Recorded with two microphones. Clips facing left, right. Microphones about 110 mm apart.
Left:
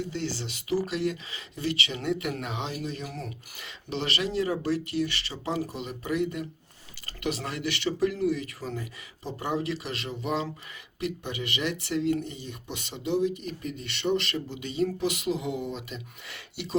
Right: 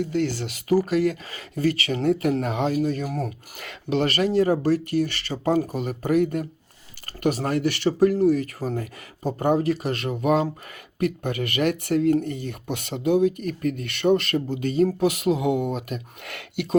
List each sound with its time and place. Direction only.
0.0 s speech: 55° right (ahead or behind)